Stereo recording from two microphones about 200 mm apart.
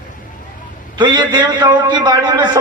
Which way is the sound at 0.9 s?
25° right (ahead or behind).